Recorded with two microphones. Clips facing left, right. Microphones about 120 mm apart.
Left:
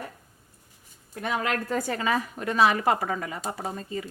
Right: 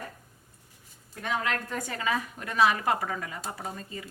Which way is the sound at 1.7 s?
30° left (ahead or behind).